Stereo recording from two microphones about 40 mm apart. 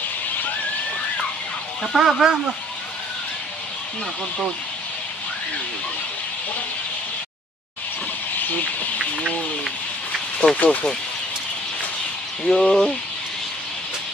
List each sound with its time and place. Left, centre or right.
1.8 s speech: centre
10.6 s speech: left
12.4 s bird: centre